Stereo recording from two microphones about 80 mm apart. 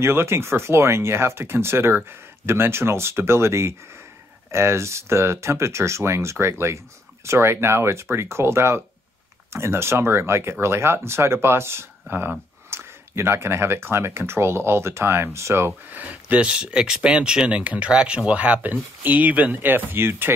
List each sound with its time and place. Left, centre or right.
0.0 s speech: right
15.9 s speech: right